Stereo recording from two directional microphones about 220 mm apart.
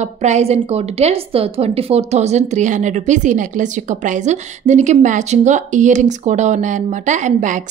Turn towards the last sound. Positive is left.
turn(degrees=-35)  # may be behind; listen again after turning